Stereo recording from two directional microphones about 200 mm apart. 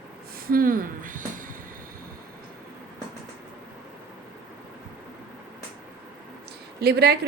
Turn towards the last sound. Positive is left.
turn(degrees=-55)  # may be behind; listen again after turning